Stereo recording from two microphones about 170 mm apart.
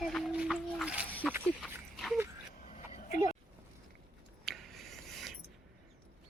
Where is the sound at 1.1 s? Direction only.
10° left (ahead or behind).